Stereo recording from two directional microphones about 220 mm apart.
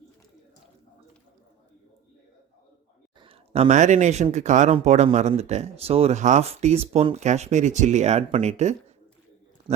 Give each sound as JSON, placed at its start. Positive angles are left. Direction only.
{"t": 3.2, "sound": "speech", "side_deg": -25}